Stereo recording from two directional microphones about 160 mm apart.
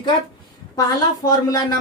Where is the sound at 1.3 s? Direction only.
20° left (ahead or behind).